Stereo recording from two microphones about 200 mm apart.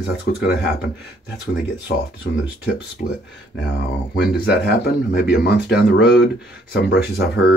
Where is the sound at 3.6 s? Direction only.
55° left (ahead or behind).